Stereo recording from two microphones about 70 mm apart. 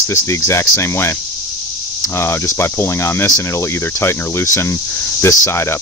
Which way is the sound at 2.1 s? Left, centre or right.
Left.